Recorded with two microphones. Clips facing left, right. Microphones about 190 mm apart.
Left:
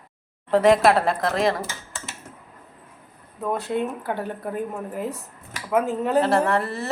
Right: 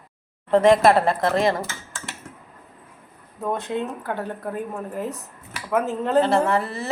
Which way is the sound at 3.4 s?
5° left (ahead or behind).